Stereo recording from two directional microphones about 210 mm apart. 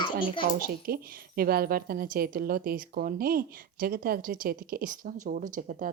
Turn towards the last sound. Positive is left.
turn(degrees=-40)  # may be behind; listen again after turning